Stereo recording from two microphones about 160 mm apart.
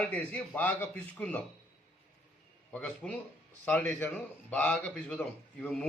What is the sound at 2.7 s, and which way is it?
A man's voice, 5° left (ahead or behind).